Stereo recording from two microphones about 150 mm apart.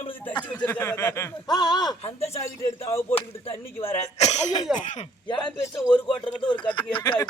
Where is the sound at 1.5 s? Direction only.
25° left (ahead or behind).